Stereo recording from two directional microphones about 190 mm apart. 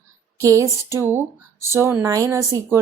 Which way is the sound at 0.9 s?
10° right (ahead or behind).